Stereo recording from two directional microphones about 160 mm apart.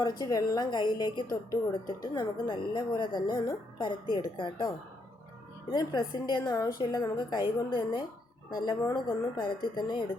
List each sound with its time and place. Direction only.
0.0 s speech: 25° left (ahead or behind)
5.7 s speech: 25° left (ahead or behind)